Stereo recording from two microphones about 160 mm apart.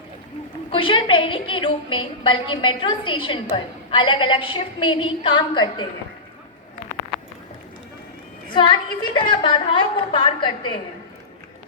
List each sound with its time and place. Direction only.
0.7 s a woman's voice: 35° left (ahead or behind)
8.5 s a woman's voice: 30° left (ahead or behind)